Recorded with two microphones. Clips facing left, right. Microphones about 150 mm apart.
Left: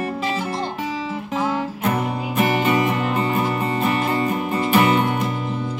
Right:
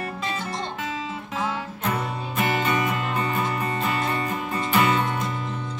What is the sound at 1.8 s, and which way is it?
Music, 15° left (ahead or behind).